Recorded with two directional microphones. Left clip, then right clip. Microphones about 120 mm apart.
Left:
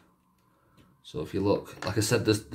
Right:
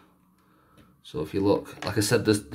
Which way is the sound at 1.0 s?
20° right (ahead or behind).